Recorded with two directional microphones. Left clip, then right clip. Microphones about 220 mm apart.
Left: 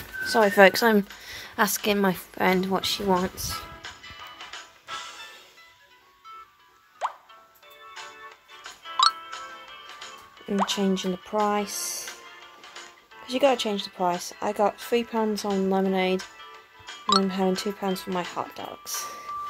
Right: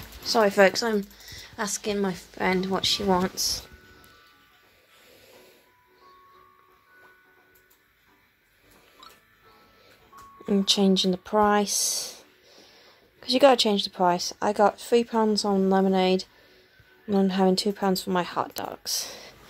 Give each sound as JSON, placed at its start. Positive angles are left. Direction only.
{"t": 0.2, "sound": "speech", "side_deg": 10}
{"t": 1.2, "sound": "speech", "side_deg": 30}
{"t": 10.4, "sound": "speech", "side_deg": -15}
{"t": 13.2, "sound": "speech", "side_deg": -15}